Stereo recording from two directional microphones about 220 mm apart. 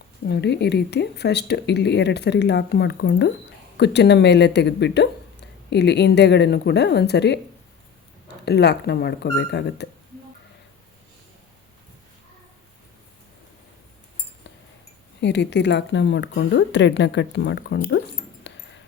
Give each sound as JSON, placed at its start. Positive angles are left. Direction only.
{"t": 0.3, "sound": "speech", "side_deg": 50}
{"t": 8.4, "sound": "speech", "side_deg": 50}
{"t": 15.2, "sound": "speech", "side_deg": 50}
{"t": 18.5, "sound": "music", "side_deg": 55}